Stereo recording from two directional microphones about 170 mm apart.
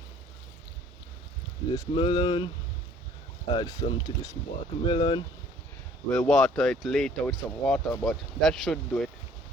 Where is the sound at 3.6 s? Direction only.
25° left (ahead or behind).